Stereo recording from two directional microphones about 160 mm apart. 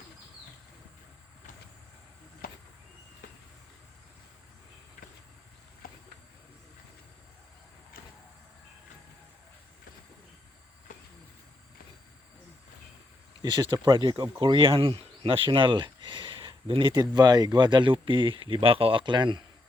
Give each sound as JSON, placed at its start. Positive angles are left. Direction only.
{"t": 13.4, "sound": "speech", "side_deg": -25}